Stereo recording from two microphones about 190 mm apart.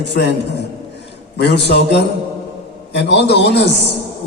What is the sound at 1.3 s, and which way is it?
A man's voice, 60° left (ahead or behind).